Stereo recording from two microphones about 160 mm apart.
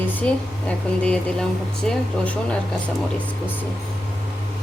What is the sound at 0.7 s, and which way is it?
Speech, 5° left (ahead or behind).